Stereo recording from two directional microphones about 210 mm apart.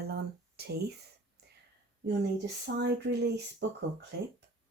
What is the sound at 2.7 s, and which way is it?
Speech, 50° right (ahead or behind).